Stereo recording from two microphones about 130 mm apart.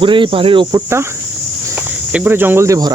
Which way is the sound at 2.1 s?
15° right (ahead or behind).